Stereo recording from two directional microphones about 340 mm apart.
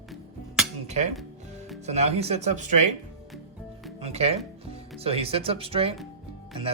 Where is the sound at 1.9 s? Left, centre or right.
Centre.